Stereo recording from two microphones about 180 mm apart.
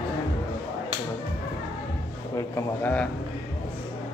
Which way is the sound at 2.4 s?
15° left (ahead or behind).